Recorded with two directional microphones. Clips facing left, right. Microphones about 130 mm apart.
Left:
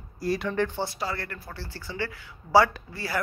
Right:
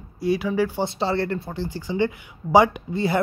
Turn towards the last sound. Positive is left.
turn(degrees=-20)  # may be behind; listen again after turning